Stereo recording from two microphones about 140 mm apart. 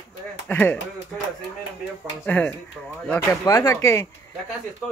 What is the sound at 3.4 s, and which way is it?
Speech, 25° left (ahead or behind).